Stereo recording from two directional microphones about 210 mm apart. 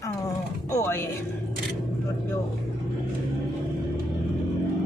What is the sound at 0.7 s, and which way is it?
Speech, 10° left (ahead or behind).